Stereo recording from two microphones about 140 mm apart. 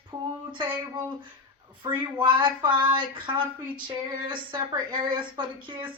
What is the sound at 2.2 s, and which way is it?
Speech, 35° right (ahead or behind).